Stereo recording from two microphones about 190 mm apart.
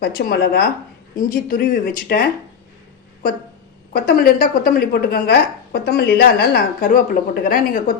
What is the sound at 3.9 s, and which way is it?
A woman's voice, 50° left (ahead or behind).